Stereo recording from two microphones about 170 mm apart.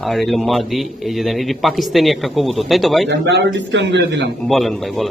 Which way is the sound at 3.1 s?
90° right.